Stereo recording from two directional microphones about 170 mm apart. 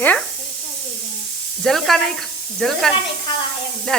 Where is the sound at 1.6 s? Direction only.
Centre (ahead or behind).